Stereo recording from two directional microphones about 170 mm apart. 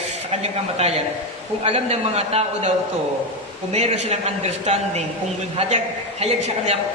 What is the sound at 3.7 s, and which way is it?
A woman's voice, 40° right (ahead or behind).